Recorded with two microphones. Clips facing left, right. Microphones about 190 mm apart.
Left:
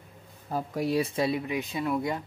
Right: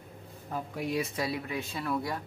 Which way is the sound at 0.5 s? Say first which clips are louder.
Left 5 dB; 35° left (ahead or behind).